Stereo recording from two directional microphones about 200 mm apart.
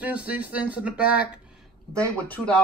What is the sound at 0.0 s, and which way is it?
Speech, 5° right (ahead or behind).